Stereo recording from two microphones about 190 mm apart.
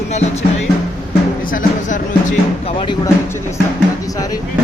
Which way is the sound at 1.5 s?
45° left (ahead or behind).